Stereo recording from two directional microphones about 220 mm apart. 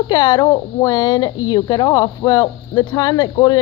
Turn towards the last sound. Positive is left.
turn(degrees=15)  # may be behind; listen again after turning